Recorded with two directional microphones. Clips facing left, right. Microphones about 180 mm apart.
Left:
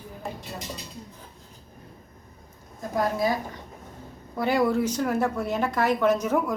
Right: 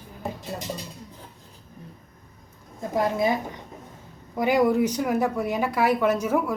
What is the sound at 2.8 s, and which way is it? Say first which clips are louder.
A woman's voice: right 2 dB; 20° right (ahead or behind).